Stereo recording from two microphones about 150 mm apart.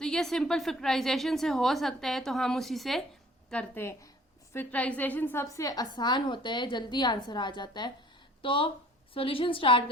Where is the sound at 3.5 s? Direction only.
10° left (ahead or behind).